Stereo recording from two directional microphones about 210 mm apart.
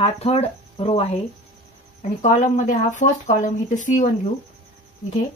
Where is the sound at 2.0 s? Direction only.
35° left (ahead or behind).